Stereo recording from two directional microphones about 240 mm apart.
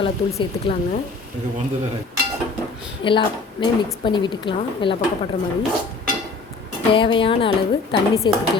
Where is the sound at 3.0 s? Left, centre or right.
Centre.